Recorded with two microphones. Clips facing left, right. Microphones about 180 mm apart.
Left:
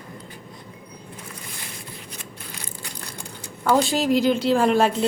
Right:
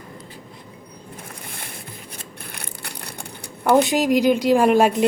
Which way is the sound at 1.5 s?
55° right (ahead or behind).